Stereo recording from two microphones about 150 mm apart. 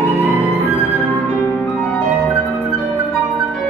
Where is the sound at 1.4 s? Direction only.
15° left (ahead or behind).